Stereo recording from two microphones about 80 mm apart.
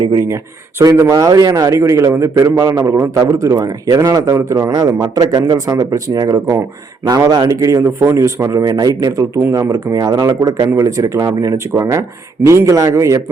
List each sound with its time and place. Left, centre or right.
0.8 s a man's voice: right
1.1 s a man's voice: right
5.1 s a man's voice: right